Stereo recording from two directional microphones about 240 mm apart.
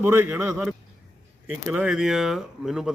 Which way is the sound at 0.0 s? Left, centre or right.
Centre.